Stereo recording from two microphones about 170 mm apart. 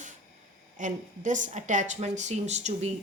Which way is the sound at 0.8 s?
50° right (ahead or behind).